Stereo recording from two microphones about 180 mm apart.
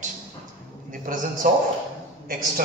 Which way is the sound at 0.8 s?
50° right (ahead or behind).